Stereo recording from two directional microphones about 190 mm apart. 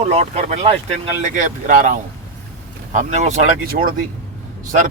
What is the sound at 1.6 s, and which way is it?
A man's voice, 45° right (ahead or behind).